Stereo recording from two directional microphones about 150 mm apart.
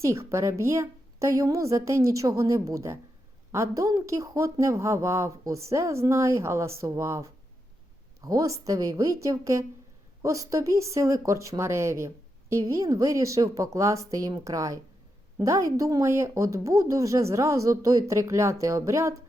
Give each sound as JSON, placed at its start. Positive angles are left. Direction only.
{"t": 0.0, "sound": "speech", "side_deg": -20}